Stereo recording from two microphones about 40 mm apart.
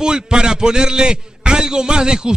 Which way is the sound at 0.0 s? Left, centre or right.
Centre.